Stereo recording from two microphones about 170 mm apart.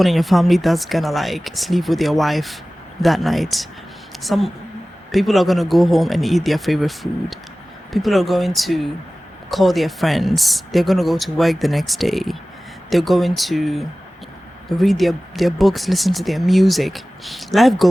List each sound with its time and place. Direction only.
0.0 s speech: centre (ahead or behind)